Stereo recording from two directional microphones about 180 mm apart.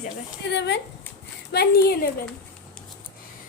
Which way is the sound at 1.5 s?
60° left (ahead or behind).